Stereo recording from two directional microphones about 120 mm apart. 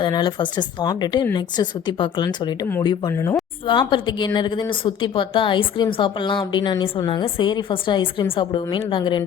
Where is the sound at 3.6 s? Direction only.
45° left (ahead or behind).